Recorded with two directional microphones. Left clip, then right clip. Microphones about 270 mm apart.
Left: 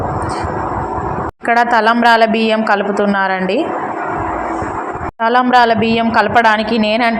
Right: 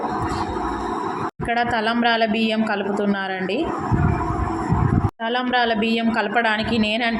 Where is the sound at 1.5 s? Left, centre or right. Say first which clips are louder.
Left 10 dB; centre.